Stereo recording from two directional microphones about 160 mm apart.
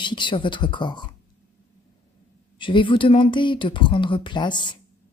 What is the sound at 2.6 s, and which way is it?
Speech, 30° left (ahead or behind).